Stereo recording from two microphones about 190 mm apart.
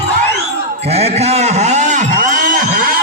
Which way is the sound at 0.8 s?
35° right (ahead or behind).